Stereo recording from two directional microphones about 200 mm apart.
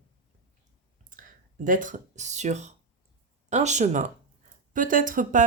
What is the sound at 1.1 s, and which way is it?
Speech, 40° right (ahead or behind).